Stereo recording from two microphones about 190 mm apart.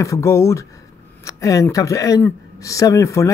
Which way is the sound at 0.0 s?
15° left (ahead or behind).